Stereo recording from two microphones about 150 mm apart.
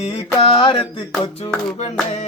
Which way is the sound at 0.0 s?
45° left (ahead or behind).